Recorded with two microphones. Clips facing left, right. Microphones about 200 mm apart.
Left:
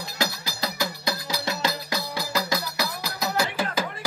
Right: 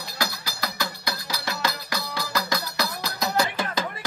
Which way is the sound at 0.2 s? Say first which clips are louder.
Left 2 dB; 25° left (ahead or behind).